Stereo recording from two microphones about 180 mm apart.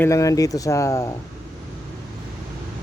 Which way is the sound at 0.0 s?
15° left (ahead or behind).